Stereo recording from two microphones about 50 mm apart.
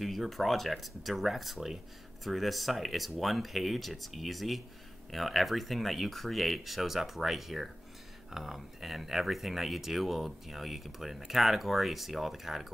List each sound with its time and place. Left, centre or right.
0.0 s speech: centre